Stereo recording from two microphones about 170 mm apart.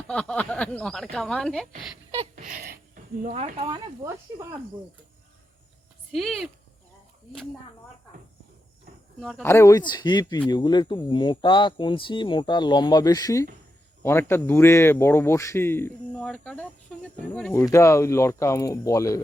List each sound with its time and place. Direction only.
0.1 s a woman's voice: 5° left (ahead or behind)
2.3 s a sound: 55° right (ahead or behind)
3.6 s speech: 30° right (ahead or behind)
6.1 s a woman's voice: centre (ahead or behind)
9.4 s speech: 15° left (ahead or behind)
17.5 s speech: 15° left (ahead or behind)